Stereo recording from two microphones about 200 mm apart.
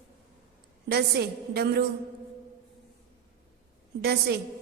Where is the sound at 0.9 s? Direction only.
55° right (ahead or behind).